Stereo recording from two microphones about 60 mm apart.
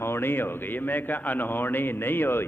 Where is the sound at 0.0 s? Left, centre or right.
Left.